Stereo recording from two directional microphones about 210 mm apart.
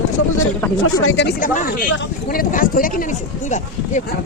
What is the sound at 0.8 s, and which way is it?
Speech, 70° left (ahead or behind).